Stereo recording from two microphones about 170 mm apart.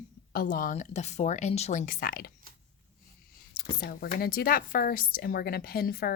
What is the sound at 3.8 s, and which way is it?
A woman's voice, 65° left (ahead or behind).